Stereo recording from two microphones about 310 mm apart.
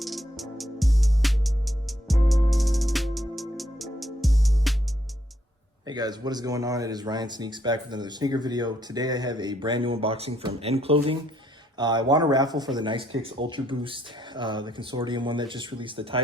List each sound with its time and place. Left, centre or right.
0.0 s music: centre
5.8 s speech: centre
13.1 s speech: right
13.5 s speech: centre